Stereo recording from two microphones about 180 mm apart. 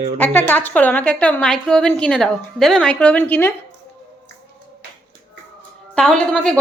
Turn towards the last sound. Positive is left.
turn(degrees=5)  # may be behind; listen again after turning